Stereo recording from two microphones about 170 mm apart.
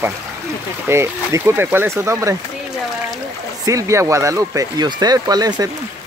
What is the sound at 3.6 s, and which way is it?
Speech, 20° right (ahead or behind).